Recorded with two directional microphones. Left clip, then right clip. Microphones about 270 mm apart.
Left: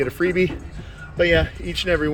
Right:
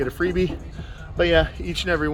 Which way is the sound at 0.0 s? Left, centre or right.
Centre.